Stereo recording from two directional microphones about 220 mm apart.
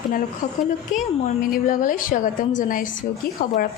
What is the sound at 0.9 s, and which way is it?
Speech, 35° left (ahead or behind).